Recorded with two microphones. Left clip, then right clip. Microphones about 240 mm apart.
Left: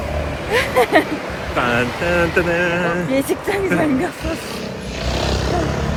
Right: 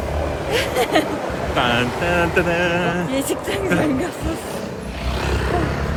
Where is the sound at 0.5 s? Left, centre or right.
Left.